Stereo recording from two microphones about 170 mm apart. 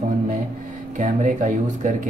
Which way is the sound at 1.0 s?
50° right (ahead or behind).